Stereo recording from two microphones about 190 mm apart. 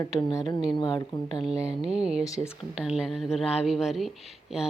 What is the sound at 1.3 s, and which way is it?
Speech, 5° right (ahead or behind).